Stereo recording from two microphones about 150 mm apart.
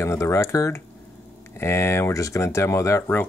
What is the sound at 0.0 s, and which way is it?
Speech, 20° left (ahead or behind).